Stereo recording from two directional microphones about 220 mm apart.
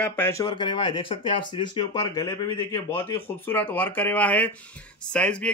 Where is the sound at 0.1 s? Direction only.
10° left (ahead or behind).